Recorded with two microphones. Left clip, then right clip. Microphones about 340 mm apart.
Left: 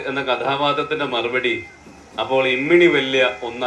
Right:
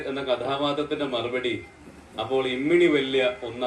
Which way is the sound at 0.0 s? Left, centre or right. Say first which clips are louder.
Left 6 dB; centre.